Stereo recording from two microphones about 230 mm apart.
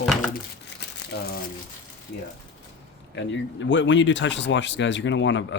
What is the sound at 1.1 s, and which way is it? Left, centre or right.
Speech, left.